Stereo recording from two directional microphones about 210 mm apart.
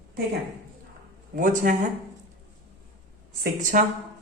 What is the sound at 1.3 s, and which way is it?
Speech, 40° right (ahead or behind).